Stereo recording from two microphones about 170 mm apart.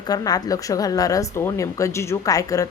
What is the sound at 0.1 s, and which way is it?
Speech, 20° left (ahead or behind).